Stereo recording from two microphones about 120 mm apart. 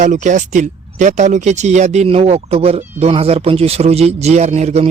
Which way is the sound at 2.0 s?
55° right (ahead or behind).